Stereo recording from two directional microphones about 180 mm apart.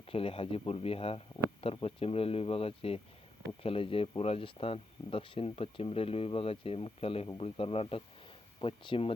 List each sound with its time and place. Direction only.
0.1 s speech: 30° left (ahead or behind)